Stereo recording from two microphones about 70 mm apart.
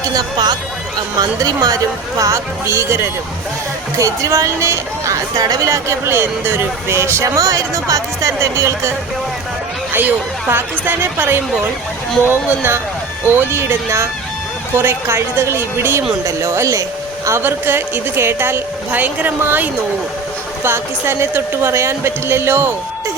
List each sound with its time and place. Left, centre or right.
0.0 s speech: right
1.4 s speech: right
6.1 s speech: right
9.9 s a woman's voice: right
18.9 s a woman's voice: right